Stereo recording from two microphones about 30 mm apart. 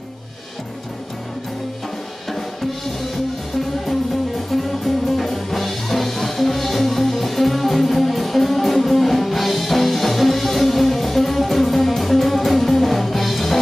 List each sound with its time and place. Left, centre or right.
4.5 s music: centre